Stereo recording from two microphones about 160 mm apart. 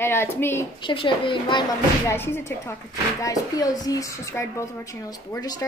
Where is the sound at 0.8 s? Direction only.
30° left (ahead or behind).